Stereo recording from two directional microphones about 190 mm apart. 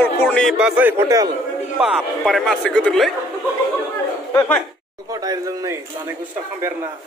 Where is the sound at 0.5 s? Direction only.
5° right (ahead or behind).